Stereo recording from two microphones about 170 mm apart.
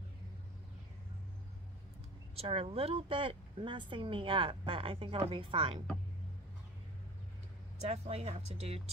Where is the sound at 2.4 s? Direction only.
35° right (ahead or behind).